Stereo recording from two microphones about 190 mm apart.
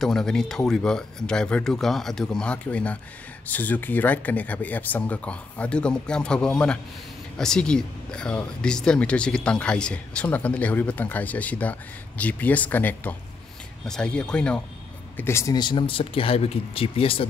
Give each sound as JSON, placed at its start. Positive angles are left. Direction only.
{"t": 0.0, "sound": "speech", "side_deg": 5}